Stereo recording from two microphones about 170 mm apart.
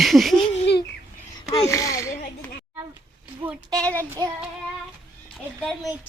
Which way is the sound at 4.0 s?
20° right (ahead or behind).